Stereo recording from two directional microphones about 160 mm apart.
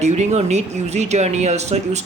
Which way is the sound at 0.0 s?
45° right (ahead or behind).